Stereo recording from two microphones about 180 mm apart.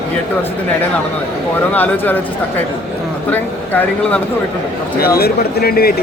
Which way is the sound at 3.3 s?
10° left (ahead or behind).